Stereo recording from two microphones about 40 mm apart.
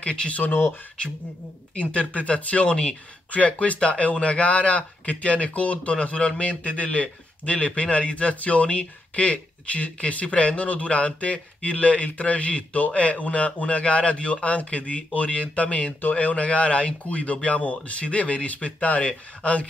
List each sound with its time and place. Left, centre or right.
0.0 s speech: left
0.5 s speech: left
1.8 s speech: left